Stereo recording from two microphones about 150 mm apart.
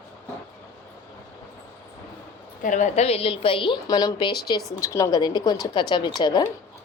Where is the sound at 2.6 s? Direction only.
55° left (ahead or behind).